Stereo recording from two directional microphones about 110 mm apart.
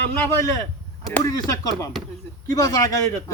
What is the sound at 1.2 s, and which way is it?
A man's voice, 35° left (ahead or behind).